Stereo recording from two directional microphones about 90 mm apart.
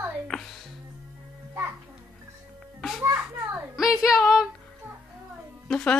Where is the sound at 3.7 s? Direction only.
5° right (ahead or behind).